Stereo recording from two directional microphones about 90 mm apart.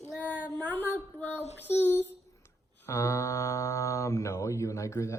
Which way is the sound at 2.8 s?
35° left (ahead or behind).